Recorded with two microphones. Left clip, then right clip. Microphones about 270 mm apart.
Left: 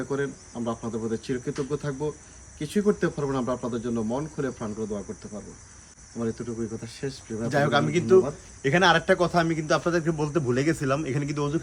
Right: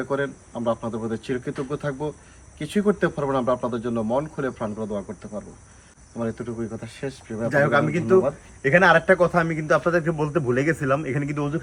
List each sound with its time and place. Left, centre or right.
0.0 s a man's voice: centre